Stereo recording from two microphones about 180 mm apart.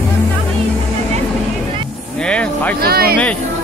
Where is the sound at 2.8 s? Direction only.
60° right (ahead or behind).